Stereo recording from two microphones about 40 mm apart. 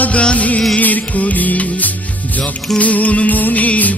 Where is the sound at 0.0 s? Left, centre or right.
Left.